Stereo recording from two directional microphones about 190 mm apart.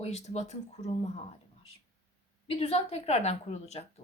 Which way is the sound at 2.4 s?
30° left (ahead or behind).